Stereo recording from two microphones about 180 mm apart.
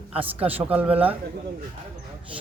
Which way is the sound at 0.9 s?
30° right (ahead or behind).